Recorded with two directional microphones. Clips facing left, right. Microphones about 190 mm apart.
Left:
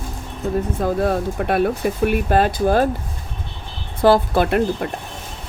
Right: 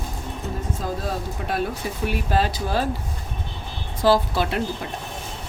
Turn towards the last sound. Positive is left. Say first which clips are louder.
# left 7 dB
turn(degrees=55)  # may be behind; listen again after turning